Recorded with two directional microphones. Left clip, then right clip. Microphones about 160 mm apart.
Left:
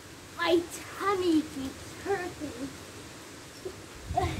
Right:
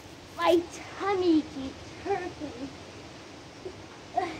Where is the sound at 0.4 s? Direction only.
30° left (ahead or behind).